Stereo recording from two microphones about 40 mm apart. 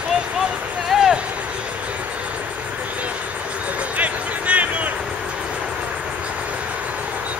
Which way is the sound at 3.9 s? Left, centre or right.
Right.